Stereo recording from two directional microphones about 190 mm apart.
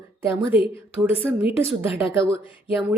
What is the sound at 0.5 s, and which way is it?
Speech, 10° right (ahead or behind).